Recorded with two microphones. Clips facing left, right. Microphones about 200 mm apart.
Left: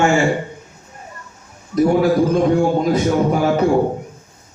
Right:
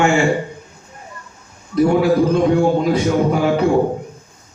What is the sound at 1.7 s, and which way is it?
Speech, 45° left (ahead or behind).